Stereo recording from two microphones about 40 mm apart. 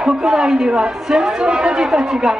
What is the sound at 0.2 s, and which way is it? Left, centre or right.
A woman's voice, centre.